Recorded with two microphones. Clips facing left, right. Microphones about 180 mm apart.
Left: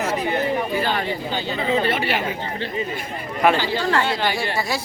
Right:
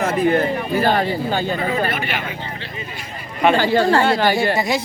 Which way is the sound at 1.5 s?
20° left (ahead or behind).